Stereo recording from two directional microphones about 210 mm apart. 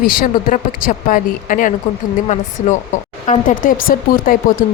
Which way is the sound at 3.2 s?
35° left (ahead or behind).